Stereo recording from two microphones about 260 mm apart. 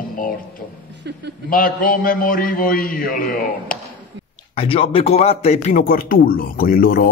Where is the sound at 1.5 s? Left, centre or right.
Left.